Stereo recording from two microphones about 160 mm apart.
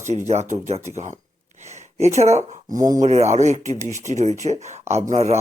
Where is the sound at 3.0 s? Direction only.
45° right (ahead or behind).